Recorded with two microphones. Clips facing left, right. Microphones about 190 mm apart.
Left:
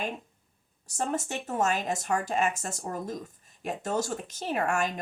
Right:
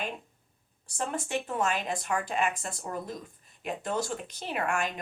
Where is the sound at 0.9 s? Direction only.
40° left (ahead or behind).